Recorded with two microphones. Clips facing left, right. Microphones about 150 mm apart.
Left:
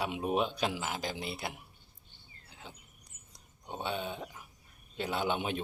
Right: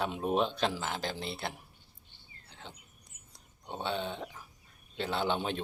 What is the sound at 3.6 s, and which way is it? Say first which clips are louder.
Speech: right 1 dB; 5° left (ahead or behind).